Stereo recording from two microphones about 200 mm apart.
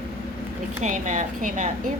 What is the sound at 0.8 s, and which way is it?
Speech, 40° right (ahead or behind).